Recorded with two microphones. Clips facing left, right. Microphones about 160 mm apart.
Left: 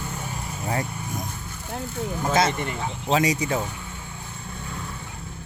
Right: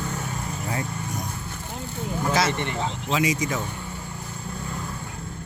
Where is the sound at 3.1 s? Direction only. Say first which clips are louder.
Left 3 dB; 35° left (ahead or behind).